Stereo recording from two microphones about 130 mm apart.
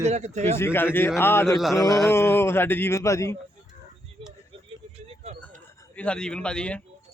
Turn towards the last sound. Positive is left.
turn(degrees=10)  # may be behind; listen again after turning